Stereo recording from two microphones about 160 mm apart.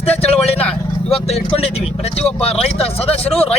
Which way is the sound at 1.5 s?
40° left (ahead or behind).